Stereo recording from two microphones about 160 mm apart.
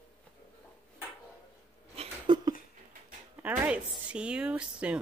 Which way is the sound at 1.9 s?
40° right (ahead or behind).